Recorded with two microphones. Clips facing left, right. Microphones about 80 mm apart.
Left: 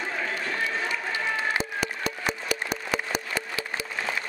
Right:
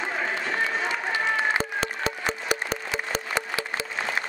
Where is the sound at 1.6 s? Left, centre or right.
Right.